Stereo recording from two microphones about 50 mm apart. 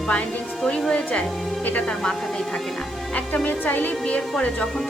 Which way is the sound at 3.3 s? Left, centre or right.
Left.